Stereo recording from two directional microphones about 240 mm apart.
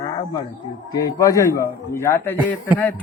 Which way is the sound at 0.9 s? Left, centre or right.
Centre.